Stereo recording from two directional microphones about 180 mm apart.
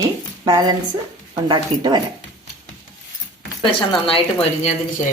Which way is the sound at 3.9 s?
30° left (ahead or behind).